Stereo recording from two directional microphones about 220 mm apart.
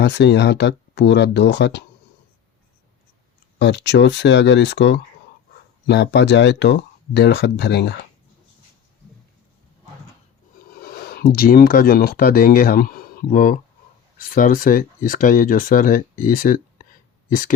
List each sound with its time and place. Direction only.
0.0 s speech: 50° left (ahead or behind)
3.6 s speech: 50° left (ahead or behind)
10.7 s speech: 45° left (ahead or behind)